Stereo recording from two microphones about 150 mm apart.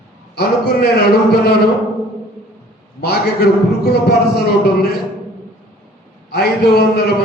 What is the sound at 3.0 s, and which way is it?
A man's voice, 90° left.